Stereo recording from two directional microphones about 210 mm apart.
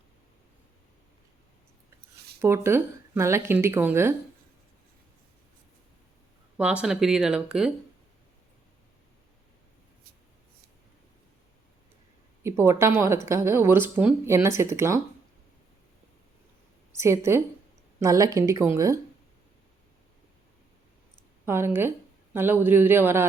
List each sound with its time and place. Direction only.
2.4 s speech: 10° right (ahead or behind)
6.6 s speech: 5° right (ahead or behind)
12.4 s speech: 10° right (ahead or behind)
16.9 s speech: 15° right (ahead or behind)
21.4 s speech: 10° right (ahead or behind)